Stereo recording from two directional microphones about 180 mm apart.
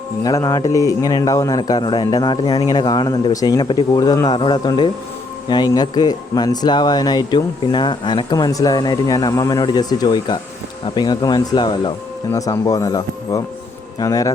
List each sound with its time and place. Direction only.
0.2 s speech: 20° left (ahead or behind)